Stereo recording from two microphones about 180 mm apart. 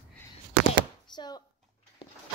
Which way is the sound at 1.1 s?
25° left (ahead or behind).